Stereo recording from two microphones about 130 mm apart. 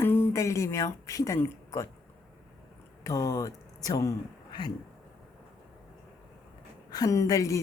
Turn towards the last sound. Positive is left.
turn(degrees=25)  # may be behind; listen again after turning